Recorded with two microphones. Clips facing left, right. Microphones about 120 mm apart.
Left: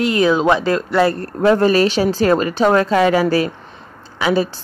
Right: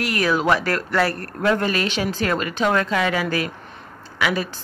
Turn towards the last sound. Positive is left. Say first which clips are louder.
# left 6 dB
turn(degrees=30)  # may be behind; listen again after turning